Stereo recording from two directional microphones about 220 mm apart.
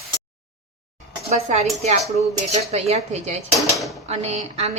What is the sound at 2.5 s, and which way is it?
Speech, 30° right (ahead or behind).